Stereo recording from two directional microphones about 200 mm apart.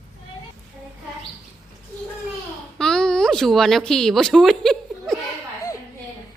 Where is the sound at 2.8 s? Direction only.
5° left (ahead or behind).